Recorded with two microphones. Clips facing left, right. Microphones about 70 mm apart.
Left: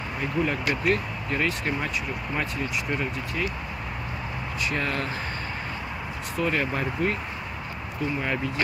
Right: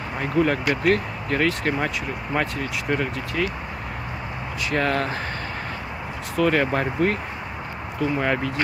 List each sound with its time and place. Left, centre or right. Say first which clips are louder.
0.2 s speech: right 5 dB; right
4.6 s speech: right 6 dB; right
6.3 s speech: right 6 dB; right